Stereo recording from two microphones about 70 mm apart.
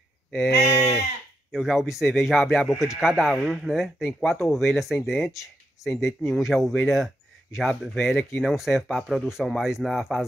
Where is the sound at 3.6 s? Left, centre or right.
Centre.